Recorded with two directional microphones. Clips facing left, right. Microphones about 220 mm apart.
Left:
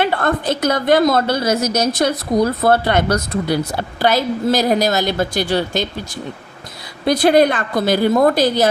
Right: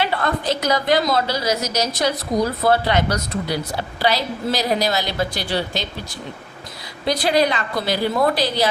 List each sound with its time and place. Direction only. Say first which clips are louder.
0.0 s a woman's voice: left 4 dB; 55° left (ahead or behind)
7.0 s a woman's voice: left 6 dB; 55° left (ahead or behind)